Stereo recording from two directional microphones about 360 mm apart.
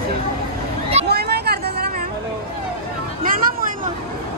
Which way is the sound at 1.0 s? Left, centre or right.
Right.